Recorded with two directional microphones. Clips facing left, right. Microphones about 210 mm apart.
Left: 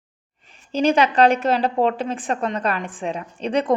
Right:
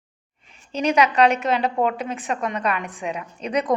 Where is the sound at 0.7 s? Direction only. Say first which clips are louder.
Left 2 dB; 30° left (ahead or behind).